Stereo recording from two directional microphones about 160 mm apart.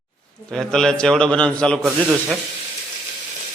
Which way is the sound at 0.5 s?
5° left (ahead or behind).